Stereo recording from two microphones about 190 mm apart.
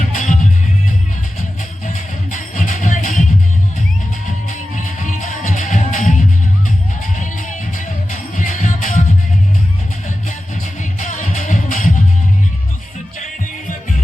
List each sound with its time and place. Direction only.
0.1 s music: 40° left (ahead or behind)
1.9 s music: 40° left (ahead or behind)
4.4 s music: 40° left (ahead or behind)
11.0 s music: 40° left (ahead or behind)